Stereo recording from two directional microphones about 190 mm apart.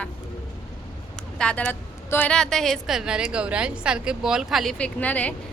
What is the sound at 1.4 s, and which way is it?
A woman's voice, 5° left (ahead or behind).